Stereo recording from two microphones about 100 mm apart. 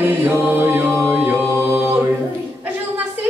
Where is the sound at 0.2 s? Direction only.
20° right (ahead or behind).